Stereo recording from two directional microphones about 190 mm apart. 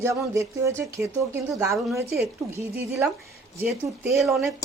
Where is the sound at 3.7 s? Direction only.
Centre (ahead or behind).